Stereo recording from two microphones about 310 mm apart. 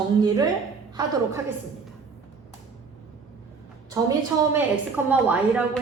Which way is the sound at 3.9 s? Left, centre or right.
Centre.